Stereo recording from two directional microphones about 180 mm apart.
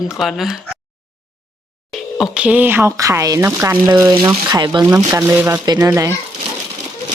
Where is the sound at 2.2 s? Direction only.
5° right (ahead or behind).